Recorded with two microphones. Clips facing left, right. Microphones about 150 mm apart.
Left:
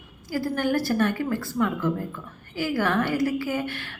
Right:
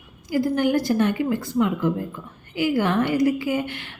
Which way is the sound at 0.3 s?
20° right (ahead or behind).